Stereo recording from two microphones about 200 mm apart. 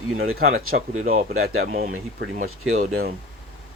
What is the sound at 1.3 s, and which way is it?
Speech, 90° right.